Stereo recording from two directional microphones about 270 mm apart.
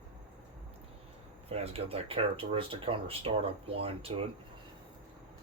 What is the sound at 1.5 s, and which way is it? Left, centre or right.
Speech, right.